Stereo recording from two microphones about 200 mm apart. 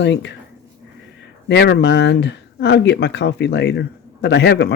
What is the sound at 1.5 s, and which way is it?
Speech, 60° left (ahead or behind).